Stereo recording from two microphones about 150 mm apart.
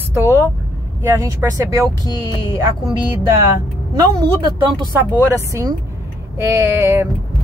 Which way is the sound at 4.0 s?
25° right (ahead or behind).